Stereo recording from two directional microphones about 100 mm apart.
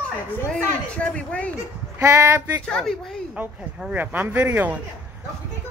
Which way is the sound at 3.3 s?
10° right (ahead or behind).